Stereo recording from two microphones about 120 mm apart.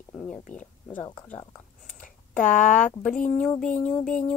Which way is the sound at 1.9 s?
90° left.